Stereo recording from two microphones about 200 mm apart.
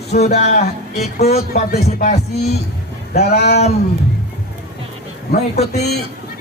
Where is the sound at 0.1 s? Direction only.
45° left (ahead or behind).